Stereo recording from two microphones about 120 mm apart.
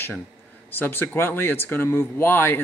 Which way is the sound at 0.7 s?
15° left (ahead or behind).